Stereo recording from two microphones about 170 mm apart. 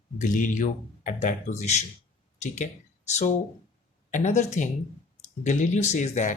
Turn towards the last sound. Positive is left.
turn(degrees=45)  # may be behind; listen again after turning